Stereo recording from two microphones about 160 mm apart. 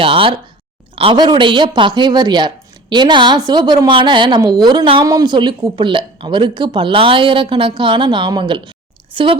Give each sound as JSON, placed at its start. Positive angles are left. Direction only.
{"t": 0.0, "sound": "speech", "side_deg": -35}